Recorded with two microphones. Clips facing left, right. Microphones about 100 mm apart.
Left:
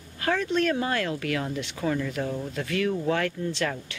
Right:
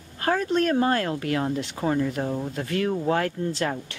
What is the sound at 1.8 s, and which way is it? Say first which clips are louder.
Speech: right 3 dB; 30° right (ahead or behind).